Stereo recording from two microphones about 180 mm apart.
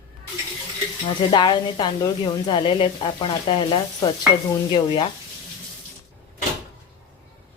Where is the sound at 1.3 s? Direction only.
25° left (ahead or behind).